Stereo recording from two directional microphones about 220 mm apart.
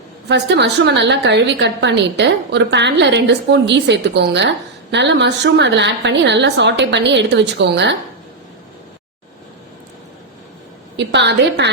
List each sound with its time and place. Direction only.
0.3 s a woman's voice: 50° right (ahead or behind)
10.9 s a woman's voice: 50° right (ahead or behind)